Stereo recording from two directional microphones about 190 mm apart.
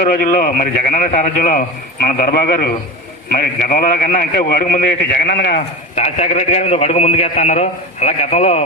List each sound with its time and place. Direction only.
0.0 s a man's voice: 45° left (ahead or behind)
6.0 s a man's voice: 35° left (ahead or behind)